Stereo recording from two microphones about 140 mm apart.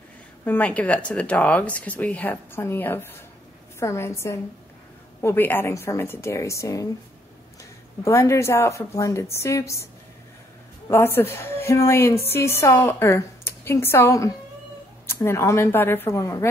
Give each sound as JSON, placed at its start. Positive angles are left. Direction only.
{"t": 0.5, "sound": "a woman's voice", "side_deg": 10}
{"t": 8.0, "sound": "a woman's voice", "side_deg": 20}
{"t": 10.9, "sound": "a woman's voice", "side_deg": 15}